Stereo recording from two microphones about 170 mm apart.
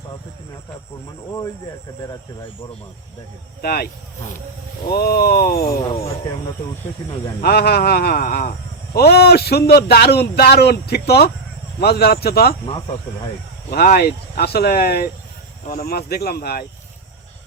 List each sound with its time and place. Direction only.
3.6 s speech: 65° left (ahead or behind)
4.9 s speech: 65° left (ahead or behind)
7.4 s a man's voice: 65° left (ahead or behind)
13.7 s speech: 65° left (ahead or behind)